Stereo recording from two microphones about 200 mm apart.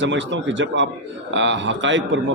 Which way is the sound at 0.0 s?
65° right (ahead or behind).